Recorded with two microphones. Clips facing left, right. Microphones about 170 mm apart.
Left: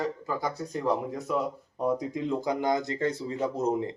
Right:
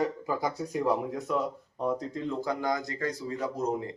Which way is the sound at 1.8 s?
10° left (ahead or behind).